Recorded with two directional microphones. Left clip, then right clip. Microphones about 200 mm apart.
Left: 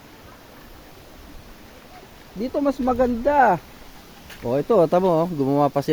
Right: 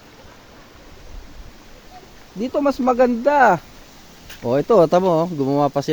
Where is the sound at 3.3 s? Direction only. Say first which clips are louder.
Right 2 dB; 15° right (ahead or behind).